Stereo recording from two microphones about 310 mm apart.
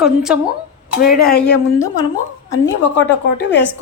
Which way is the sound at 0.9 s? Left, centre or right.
Left.